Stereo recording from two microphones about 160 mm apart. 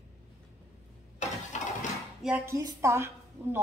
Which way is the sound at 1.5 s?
50° left (ahead or behind).